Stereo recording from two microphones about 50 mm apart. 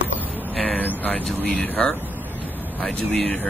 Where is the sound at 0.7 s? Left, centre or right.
Left.